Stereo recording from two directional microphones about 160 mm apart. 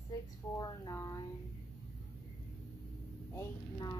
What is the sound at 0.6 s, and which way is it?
Speech, 20° left (ahead or behind).